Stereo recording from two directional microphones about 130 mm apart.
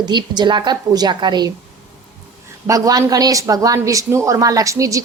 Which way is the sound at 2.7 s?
30° right (ahead or behind).